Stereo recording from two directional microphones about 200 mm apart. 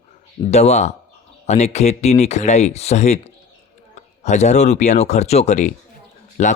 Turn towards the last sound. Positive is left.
turn(degrees=35)  # may be behind; listen again after turning